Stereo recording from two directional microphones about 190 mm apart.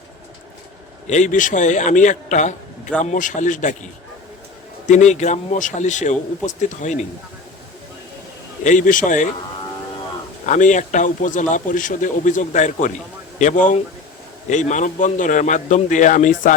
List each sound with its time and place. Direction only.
1.0 s speech: 40° left (ahead or behind)
4.9 s speech: 40° left (ahead or behind)
8.6 s speech: 45° left (ahead or behind)
10.4 s speech: 40° left (ahead or behind)